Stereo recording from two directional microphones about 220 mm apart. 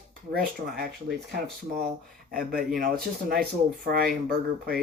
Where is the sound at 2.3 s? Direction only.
40° right (ahead or behind).